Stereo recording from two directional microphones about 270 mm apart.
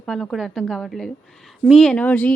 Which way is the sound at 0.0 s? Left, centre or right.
Centre.